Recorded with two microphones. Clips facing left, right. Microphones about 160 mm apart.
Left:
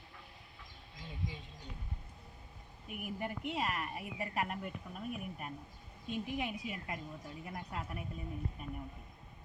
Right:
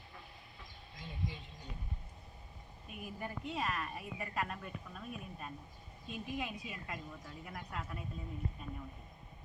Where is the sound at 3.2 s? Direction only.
20° left (ahead or behind).